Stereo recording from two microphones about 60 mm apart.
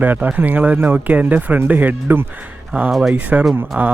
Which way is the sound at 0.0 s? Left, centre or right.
Right.